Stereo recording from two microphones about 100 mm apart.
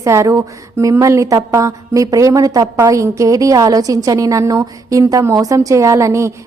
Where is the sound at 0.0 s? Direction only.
30° right (ahead or behind).